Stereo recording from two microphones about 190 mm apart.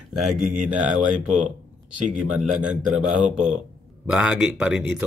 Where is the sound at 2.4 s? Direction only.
5° right (ahead or behind).